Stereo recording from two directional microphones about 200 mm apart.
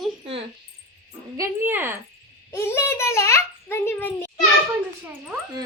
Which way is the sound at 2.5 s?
10° left (ahead or behind).